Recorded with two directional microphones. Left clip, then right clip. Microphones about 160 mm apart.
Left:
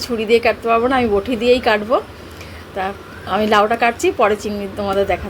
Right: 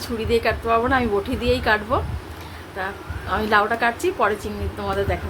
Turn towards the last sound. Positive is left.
turn(degrees=25)  # may be behind; listen again after turning